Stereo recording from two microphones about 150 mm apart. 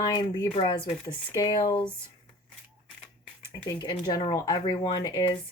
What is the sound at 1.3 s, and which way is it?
Speech, 25° left (ahead or behind).